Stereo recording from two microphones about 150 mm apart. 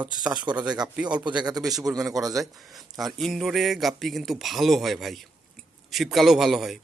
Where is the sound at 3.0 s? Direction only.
Centre (ahead or behind).